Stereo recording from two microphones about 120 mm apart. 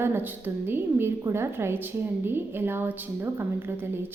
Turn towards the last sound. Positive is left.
turn(degrees=-20)  # may be behind; listen again after turning